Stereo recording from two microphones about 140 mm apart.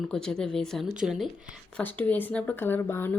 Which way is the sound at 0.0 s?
5° left (ahead or behind).